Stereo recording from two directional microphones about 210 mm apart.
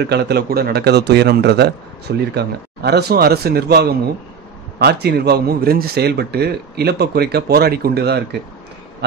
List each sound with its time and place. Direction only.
0.0 s a man's voice: 50° right (ahead or behind)